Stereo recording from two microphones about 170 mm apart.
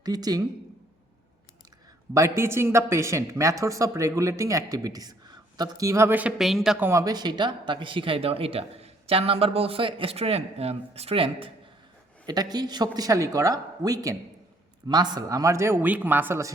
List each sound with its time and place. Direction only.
0.0 s speech: 25° right (ahead or behind)
2.1 s speech: 15° right (ahead or behind)